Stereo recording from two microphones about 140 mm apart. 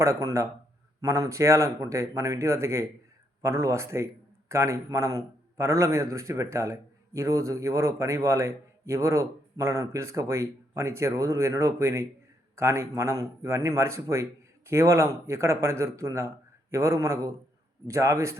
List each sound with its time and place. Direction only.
0.0 s a man's voice: 20° right (ahead or behind)